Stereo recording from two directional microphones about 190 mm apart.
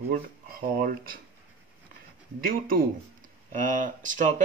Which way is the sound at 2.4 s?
50° right (ahead or behind).